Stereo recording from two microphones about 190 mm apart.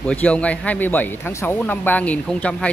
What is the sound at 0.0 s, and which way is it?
Speech, 5° left (ahead or behind).